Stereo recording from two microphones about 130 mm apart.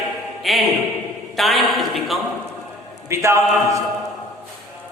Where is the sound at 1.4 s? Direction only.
Centre (ahead or behind).